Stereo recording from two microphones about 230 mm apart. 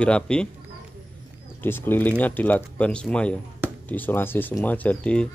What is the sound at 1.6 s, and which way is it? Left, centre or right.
Speech, centre.